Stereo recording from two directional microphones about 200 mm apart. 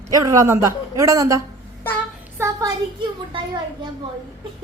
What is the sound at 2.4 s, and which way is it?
Speech, 15° right (ahead or behind).